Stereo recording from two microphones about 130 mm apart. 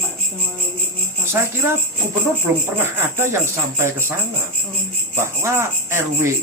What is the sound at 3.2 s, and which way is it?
Speech, 20° right (ahead or behind).